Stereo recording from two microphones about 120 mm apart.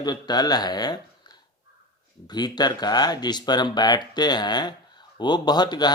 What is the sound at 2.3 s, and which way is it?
Speech, 35° left (ahead or behind).